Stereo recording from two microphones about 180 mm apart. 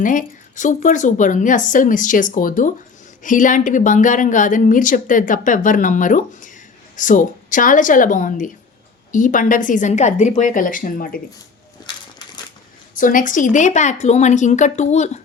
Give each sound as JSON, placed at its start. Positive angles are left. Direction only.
{"t": 0.0, "sound": "a woman's voice", "side_deg": 45}
{"t": 12.9, "sound": "a woman's voice", "side_deg": 50}